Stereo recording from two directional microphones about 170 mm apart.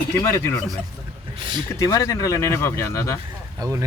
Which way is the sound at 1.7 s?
20° left (ahead or behind).